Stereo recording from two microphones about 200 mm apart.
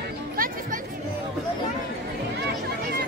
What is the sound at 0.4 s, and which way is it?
Chatter, 45° right (ahead or behind).